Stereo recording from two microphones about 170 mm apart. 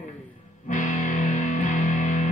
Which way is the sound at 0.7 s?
50° left (ahead or behind).